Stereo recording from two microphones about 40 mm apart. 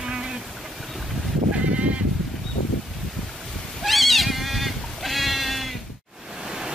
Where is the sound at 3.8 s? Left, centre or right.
Centre.